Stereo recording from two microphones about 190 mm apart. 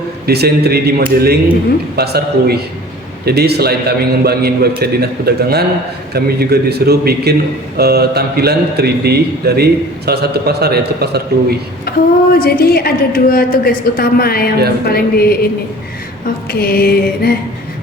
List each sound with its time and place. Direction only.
0.3 s a man's voice: 55° right (ahead or behind)
11.9 s a woman's voice: 55° left (ahead or behind)
16.5 s a woman's voice: 55° left (ahead or behind)